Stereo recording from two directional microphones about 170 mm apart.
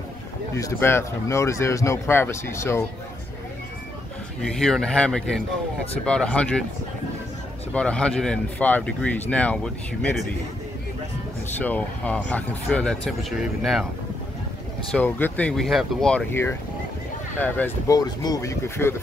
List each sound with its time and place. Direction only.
0.6 s speech: 15° left (ahead or behind)
4.4 s speech: centre (ahead or behind)
7.7 s speech: 5° left (ahead or behind)
11.6 s speech: 10° left (ahead or behind)
14.9 s speech: 10° left (ahead or behind)
17.8 s speech: 20° left (ahead or behind)